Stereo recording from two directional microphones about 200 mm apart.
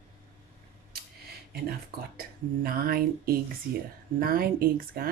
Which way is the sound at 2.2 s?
50° right (ahead or behind).